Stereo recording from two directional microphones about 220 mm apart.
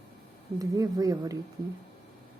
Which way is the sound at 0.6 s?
15° right (ahead or behind).